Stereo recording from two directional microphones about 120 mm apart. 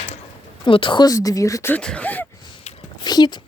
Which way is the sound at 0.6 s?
45° left (ahead or behind).